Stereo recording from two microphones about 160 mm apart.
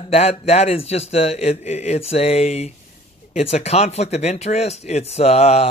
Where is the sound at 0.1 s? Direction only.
40° left (ahead or behind).